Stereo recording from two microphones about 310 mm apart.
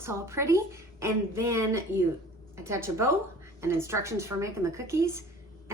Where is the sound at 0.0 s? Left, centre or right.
Centre.